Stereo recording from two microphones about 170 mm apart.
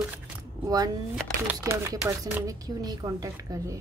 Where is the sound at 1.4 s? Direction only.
20° right (ahead or behind).